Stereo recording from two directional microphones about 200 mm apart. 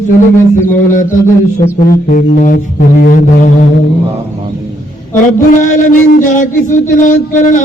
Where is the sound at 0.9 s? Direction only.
40° left (ahead or behind).